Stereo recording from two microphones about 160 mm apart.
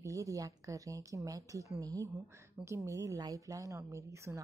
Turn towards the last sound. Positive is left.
turn(degrees=-20)  # may be behind; listen again after turning